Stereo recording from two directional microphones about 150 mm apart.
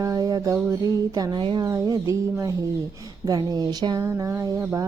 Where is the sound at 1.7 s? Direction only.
20° right (ahead or behind).